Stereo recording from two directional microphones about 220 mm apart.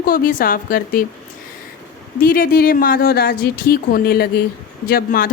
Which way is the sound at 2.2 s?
40° left (ahead or behind).